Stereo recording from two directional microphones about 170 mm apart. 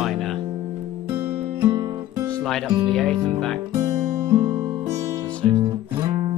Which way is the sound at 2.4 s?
Centre (ahead or behind).